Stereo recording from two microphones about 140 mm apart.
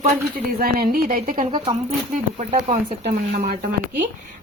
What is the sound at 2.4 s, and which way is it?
Speech, 55° right (ahead or behind).